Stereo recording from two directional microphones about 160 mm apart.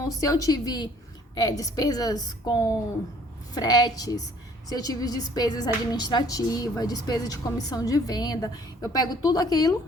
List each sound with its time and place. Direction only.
0.2 s speech: 20° left (ahead or behind)